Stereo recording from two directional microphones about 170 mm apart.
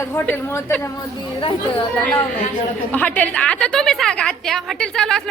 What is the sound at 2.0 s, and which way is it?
A woman's voice, 10° left (ahead or behind).